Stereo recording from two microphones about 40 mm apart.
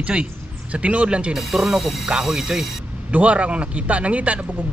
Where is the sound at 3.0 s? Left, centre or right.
Right.